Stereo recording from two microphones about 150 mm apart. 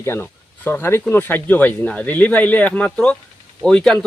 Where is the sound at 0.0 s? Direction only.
15° left (ahead or behind).